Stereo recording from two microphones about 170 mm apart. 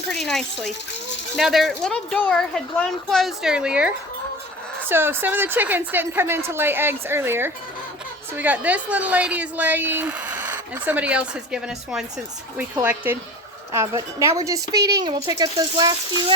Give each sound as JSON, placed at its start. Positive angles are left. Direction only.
{"t": 0.1, "sound": "a woman's voice", "side_deg": 0}